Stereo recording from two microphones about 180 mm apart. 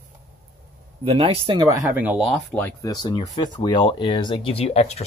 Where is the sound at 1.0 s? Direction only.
35° right (ahead or behind).